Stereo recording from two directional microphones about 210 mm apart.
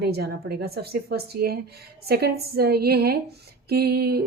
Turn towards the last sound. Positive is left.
turn(degrees=-50)  # may be behind; listen again after turning